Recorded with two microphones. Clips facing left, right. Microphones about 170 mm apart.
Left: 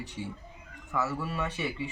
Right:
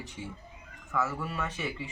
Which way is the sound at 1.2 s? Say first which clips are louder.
Left 2 dB; 5° left (ahead or behind).